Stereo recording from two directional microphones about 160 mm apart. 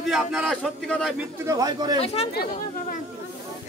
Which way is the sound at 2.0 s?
40° left (ahead or behind).